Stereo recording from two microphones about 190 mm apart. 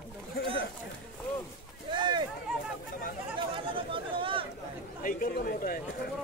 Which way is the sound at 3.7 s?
25° right (ahead or behind).